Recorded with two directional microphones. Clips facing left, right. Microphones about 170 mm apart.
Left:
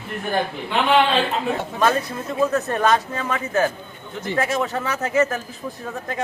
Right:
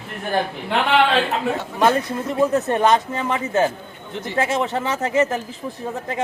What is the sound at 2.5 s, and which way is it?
Speech, 20° right (ahead or behind).